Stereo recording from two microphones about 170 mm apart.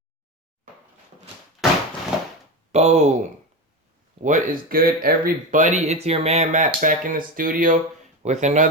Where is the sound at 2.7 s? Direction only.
40° right (ahead or behind).